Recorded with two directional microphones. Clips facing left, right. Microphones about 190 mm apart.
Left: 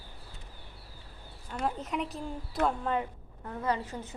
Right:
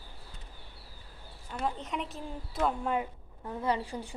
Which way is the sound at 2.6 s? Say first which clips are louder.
Left 1 dB; 65° left (ahead or behind).